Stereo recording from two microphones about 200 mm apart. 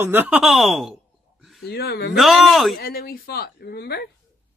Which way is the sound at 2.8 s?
50° left (ahead or behind).